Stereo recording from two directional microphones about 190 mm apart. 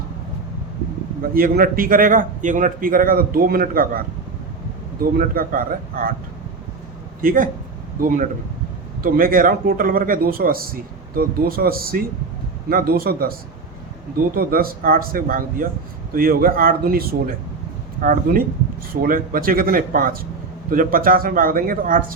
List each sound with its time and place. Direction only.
1.3 s a man's voice: 50° right (ahead or behind)
5.1 s a man's voice: 50° right (ahead or behind)
7.2 s a man's voice: 45° right (ahead or behind)
14.3 s a man's voice: 50° right (ahead or behind)